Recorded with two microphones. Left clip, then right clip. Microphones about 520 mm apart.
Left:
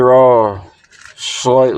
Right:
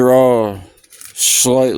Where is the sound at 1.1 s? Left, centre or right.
Right.